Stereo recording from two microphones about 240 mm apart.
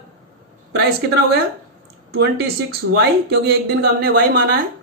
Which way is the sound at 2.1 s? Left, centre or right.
Right.